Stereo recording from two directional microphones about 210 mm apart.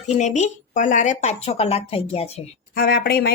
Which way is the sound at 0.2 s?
35° left (ahead or behind).